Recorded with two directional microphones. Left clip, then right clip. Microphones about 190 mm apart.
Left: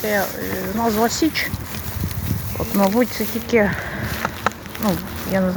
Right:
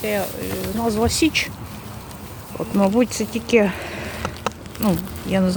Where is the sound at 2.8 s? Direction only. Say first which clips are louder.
Even; 35° right (ahead or behind).